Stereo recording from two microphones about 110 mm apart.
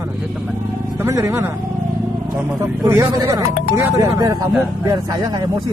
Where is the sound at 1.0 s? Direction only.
25° right (ahead or behind).